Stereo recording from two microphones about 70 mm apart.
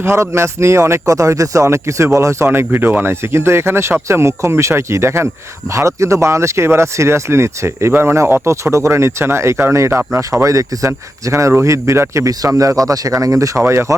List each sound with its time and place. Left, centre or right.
0.0 s speech: right
2.5 s speech: right
12.3 s speech: right